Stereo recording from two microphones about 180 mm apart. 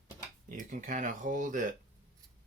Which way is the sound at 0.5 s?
45° right (ahead or behind).